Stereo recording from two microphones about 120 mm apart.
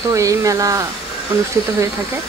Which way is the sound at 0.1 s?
25° right (ahead or behind).